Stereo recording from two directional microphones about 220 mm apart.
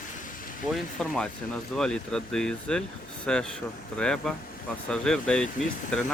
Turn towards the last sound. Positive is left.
turn(degrees=5)  # may be behind; listen again after turning